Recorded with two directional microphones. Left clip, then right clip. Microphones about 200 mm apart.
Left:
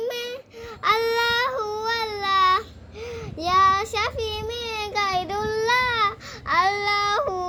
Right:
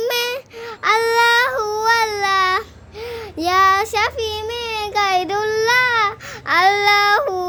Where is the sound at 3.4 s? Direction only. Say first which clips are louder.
Right 4 dB; 30° right (ahead or behind).